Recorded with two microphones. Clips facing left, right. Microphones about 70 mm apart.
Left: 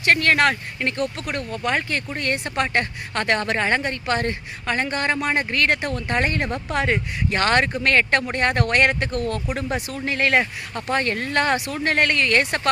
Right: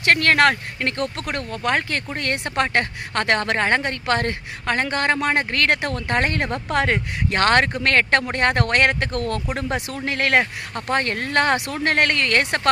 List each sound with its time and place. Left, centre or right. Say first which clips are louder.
0.0 s speech: right 1 dB; right